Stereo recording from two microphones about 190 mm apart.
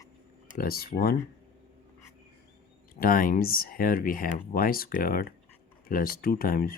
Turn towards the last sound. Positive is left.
turn(degrees=50)  # may be behind; listen again after turning